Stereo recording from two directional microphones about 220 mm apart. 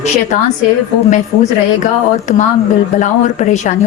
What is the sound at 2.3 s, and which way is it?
A woman's voice, 35° left (ahead or behind).